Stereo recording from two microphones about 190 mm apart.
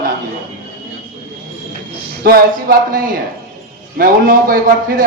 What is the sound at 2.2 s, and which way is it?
Speech, 50° right (ahead or behind).